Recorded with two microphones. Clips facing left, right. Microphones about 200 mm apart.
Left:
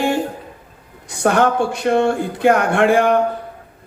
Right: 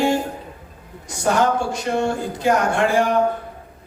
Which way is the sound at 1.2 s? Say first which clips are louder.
Left 3 dB; 60° left (ahead or behind).